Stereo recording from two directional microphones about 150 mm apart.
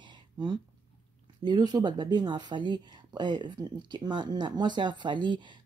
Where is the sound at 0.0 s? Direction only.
30° right (ahead or behind).